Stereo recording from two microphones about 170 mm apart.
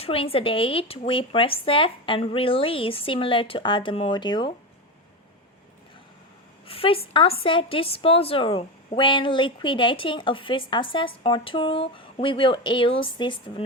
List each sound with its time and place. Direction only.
0.0 s a woman's voice: 35° left (ahead or behind)
6.7 s a woman's voice: 35° left (ahead or behind)